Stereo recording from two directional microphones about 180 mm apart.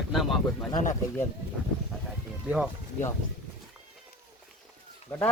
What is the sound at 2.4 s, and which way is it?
Speech, 5° right (ahead or behind).